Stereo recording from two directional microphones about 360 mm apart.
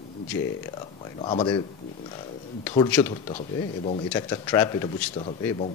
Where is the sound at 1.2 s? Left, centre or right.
Centre.